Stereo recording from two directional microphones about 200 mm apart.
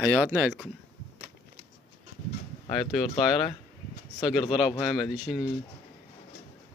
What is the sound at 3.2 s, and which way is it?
Speech, centre (ahead or behind).